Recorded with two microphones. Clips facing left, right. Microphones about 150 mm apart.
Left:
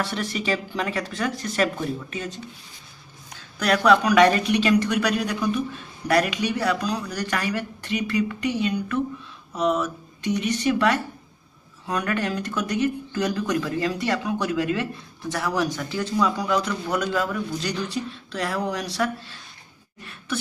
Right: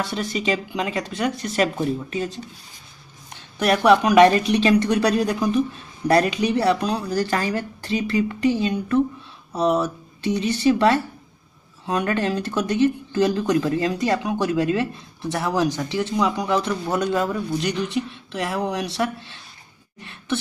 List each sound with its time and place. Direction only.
0.1 s a man's voice: 20° right (ahead or behind)
3.3 s a man's voice: 25° right (ahead or behind)
20.0 s a sound: 25° right (ahead or behind)